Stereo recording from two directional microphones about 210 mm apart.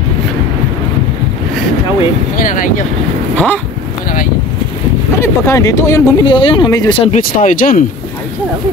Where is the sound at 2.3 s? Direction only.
40° left (ahead or behind).